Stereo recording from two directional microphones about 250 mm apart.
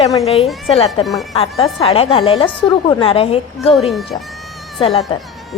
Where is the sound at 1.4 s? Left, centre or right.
Left.